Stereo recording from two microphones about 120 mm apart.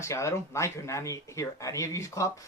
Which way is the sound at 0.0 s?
25° left (ahead or behind).